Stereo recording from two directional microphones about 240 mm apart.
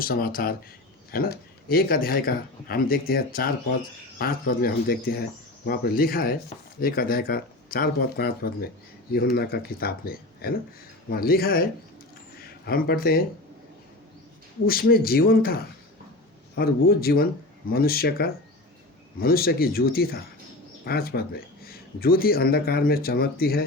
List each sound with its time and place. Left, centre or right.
0.0 s speech: left
14.7 s speech: left